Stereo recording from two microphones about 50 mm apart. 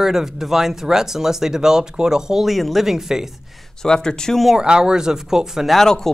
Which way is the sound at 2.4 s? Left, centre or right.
Centre.